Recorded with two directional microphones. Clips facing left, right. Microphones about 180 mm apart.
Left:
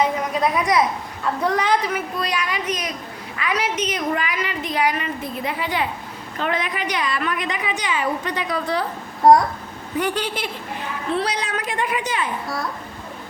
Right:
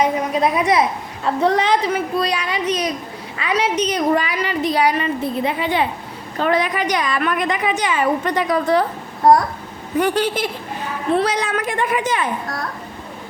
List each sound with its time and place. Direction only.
0.5 s a child's voice: 25° right (ahead or behind)
6.4 s a woman's voice: 40° right (ahead or behind)
10.0 s a woman's voice: 45° right (ahead or behind)